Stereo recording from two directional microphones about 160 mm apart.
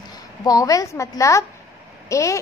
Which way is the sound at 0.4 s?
20° left (ahead or behind).